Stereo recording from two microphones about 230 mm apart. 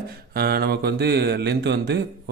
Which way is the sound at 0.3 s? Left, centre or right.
Right.